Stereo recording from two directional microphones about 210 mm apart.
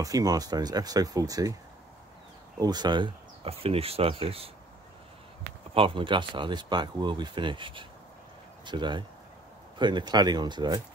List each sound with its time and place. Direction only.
0.0 s speech: 15° right (ahead or behind)
2.6 s speech: 20° right (ahead or behind)
5.8 s speech: 25° right (ahead or behind)